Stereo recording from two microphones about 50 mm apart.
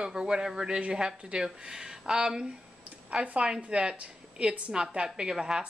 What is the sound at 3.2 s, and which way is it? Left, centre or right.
A woman's voice, right.